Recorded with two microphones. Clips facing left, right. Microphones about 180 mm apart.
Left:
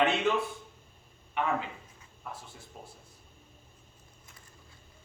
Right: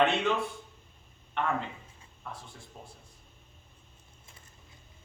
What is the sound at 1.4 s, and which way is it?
A man's voice, 5° left (ahead or behind).